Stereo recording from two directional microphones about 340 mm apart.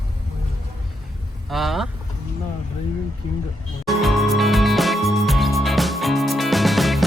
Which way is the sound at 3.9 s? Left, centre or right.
Centre.